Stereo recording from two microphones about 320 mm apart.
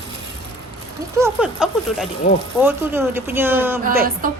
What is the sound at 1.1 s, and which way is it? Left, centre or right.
Speech, centre.